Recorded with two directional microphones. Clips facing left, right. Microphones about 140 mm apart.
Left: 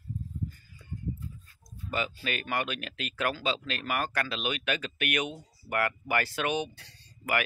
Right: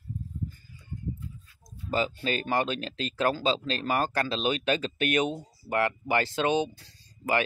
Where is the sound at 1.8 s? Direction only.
30° right (ahead or behind).